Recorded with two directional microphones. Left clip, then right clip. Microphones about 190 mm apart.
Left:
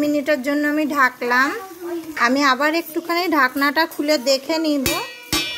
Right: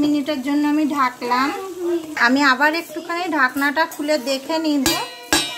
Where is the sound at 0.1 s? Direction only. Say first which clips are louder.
Left 2 dB; 40° left (ahead or behind).